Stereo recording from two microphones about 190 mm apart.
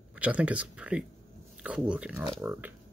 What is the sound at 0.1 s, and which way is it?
Speech, 5° right (ahead or behind).